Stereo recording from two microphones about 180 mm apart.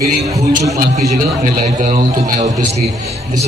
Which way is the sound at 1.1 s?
45° right (ahead or behind).